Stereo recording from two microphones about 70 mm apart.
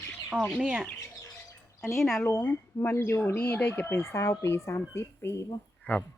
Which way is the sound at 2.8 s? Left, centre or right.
Left.